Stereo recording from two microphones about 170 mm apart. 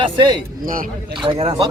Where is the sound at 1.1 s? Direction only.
35° right (ahead or behind).